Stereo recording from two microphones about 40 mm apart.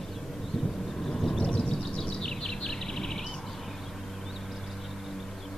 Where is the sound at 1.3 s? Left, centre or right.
Left.